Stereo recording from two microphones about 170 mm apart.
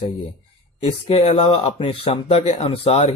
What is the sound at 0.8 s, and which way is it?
Speech, 35° left (ahead or behind).